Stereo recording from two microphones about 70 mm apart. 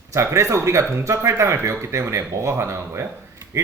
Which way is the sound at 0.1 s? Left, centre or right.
Right.